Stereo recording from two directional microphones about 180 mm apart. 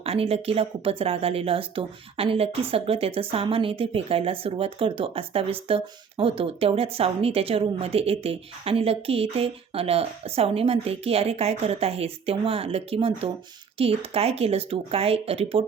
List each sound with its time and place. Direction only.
0.0 s speech: 35° right (ahead or behind)